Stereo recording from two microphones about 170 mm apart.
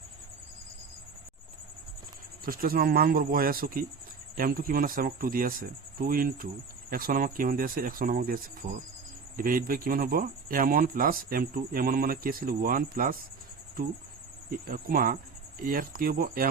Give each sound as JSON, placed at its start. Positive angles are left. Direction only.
{"t": 2.4, "sound": "speech", "side_deg": -60}
{"t": 14.5, "sound": "speech", "side_deg": -55}